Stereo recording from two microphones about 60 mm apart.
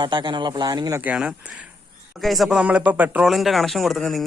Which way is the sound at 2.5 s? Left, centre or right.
Right.